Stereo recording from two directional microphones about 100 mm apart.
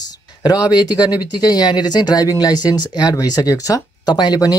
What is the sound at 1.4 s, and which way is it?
Speech, 45° left (ahead or behind).